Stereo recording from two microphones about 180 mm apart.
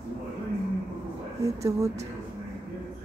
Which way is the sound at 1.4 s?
20° right (ahead or behind).